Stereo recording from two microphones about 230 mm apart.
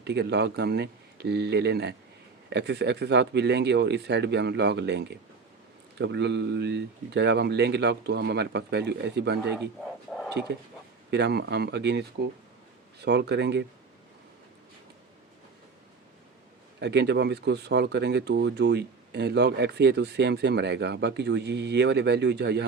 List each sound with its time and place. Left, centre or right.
0.0 s speech: right
11.1 s speech: right
13.1 s speech: right
16.8 s speech: right